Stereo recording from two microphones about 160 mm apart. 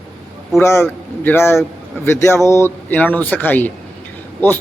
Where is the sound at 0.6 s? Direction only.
15° left (ahead or behind).